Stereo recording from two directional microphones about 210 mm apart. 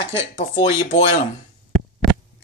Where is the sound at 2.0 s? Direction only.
Centre (ahead or behind).